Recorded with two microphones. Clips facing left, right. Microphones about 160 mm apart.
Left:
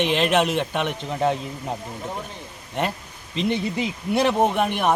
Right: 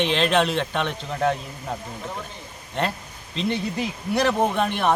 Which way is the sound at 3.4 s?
20° left (ahead or behind).